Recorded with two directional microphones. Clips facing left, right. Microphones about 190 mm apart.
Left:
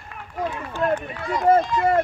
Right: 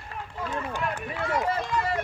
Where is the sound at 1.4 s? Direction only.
50° left (ahead or behind).